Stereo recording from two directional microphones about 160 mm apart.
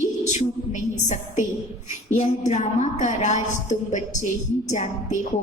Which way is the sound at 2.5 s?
50° left (ahead or behind).